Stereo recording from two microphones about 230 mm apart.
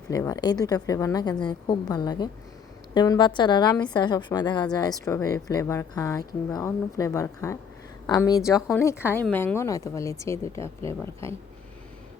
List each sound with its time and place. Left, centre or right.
0.1 s a woman's voice: centre